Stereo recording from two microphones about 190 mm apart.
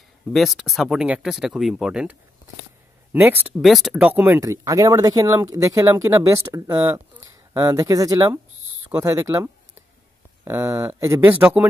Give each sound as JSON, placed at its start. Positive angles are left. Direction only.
{"t": 0.3, "sound": "speech", "side_deg": 0}